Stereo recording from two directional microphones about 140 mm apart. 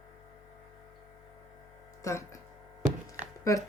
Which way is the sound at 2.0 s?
20° left (ahead or behind).